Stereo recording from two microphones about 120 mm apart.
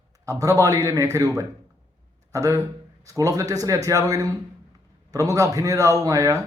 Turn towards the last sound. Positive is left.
turn(degrees=-25)  # may be behind; listen again after turning